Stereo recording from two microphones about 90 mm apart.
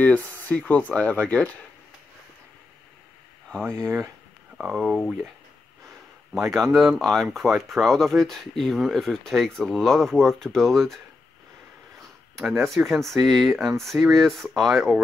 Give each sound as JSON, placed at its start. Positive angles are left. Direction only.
{"t": 0.0, "sound": "speech", "side_deg": 20}
{"t": 3.8, "sound": "speech", "side_deg": -30}
{"t": 4.6, "sound": "speech", "side_deg": -5}
{"t": 6.5, "sound": "speech", "side_deg": 0}
{"t": 12.0, "sound": "speech", "side_deg": 0}